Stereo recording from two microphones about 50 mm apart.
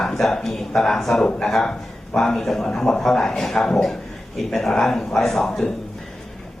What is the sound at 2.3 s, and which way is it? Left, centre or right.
Speech, centre.